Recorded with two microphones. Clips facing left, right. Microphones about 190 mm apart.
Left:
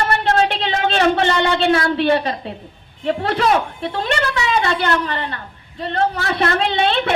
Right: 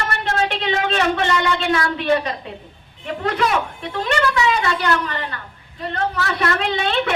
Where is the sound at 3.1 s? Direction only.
35° left (ahead or behind).